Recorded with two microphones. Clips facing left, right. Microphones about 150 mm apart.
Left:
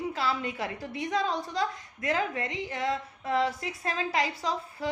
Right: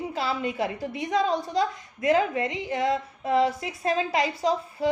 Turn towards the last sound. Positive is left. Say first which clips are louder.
# right 7 dB
turn(degrees=-20)  # may be behind; listen again after turning